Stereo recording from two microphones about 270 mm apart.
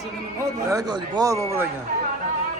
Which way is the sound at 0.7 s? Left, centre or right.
Centre.